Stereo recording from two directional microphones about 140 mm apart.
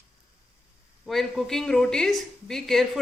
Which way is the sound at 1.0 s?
Centre (ahead or behind).